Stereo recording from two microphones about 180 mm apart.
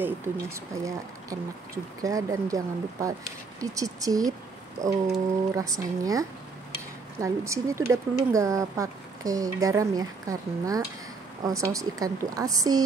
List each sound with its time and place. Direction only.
0.0 s speech: 15° right (ahead or behind)
5.5 s speech: 20° right (ahead or behind)